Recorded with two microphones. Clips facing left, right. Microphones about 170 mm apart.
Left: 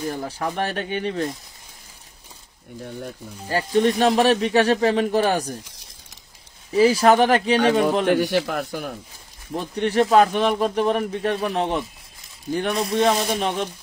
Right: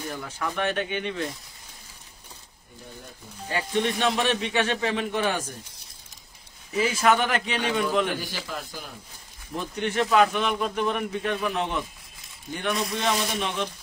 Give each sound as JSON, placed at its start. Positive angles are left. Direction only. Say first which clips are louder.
{"t": 0.1, "sound": "speech", "louder": "left 5 dB", "side_deg": 35}
{"t": 3.4, "sound": "speech", "louder": "left 7 dB", "side_deg": 40}
{"t": 6.7, "sound": "speech", "louder": "left 7 dB", "side_deg": 35}
{"t": 8.1, "sound": "speech", "louder": "left 12 dB", "side_deg": 70}
{"t": 9.5, "sound": "speech", "louder": "left 5 dB", "side_deg": 35}